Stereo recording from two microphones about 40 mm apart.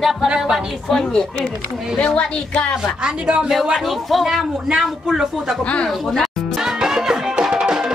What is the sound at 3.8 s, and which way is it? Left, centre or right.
Speech, centre.